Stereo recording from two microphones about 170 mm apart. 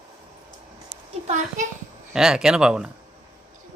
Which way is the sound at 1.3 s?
50° right (ahead or behind).